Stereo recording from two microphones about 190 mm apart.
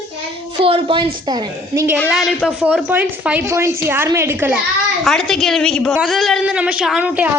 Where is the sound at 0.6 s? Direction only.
30° right (ahead or behind).